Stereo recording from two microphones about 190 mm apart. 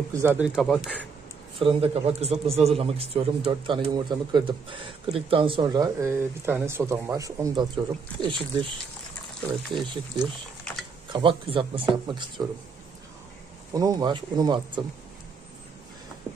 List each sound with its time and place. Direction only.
0.1 s speech: 10° right (ahead or behind)
0.6 s a man's voice: centre (ahead or behind)
1.6 s a man's voice: 30° right (ahead or behind)
13.7 s speech: 20° right (ahead or behind)
16.3 s a sound: 25° right (ahead or behind)